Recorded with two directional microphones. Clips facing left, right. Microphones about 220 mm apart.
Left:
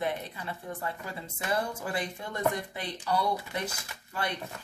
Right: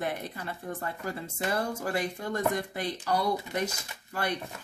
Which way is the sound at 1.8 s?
45° right (ahead or behind).